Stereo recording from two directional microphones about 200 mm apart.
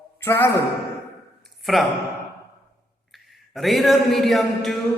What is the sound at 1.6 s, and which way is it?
Speech, centre (ahead or behind).